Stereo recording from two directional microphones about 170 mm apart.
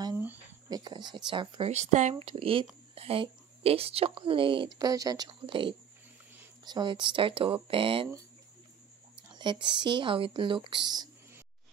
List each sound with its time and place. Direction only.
0.7 s speech: 25° right (ahead or behind)
1.7 s speech: 40° right (ahead or behind)
9.3 s speech: 25° right (ahead or behind)